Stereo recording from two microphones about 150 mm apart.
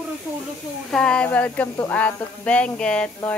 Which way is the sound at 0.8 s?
5° left (ahead or behind).